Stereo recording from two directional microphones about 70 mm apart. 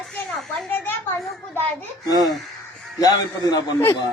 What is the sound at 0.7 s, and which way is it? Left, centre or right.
Speech, left.